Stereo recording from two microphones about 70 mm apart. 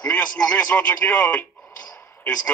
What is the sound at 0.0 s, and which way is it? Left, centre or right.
A man's voice, centre.